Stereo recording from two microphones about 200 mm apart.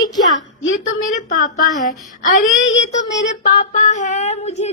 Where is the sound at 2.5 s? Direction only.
70° left (ahead or behind).